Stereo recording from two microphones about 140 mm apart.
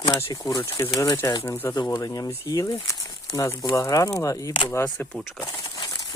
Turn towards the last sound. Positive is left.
turn(degrees=25)  # may be behind; listen again after turning